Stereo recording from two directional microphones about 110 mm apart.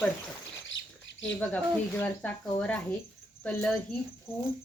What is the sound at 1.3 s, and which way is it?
Speech, 15° left (ahead or behind).